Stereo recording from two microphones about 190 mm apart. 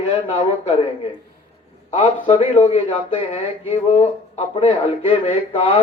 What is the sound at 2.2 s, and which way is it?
Speech, 30° left (ahead or behind).